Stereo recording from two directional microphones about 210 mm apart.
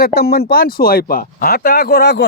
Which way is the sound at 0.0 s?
50° left (ahead or behind).